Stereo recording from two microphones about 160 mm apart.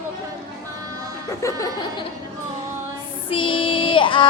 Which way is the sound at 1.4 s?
20° left (ahead or behind).